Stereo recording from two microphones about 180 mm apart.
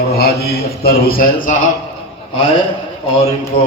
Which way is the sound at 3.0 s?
30° left (ahead or behind).